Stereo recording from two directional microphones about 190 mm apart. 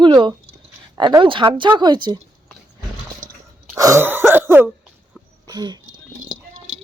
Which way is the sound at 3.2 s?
45° right (ahead or behind).